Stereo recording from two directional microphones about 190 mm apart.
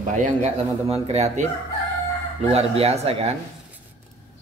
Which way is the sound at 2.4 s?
30° right (ahead or behind).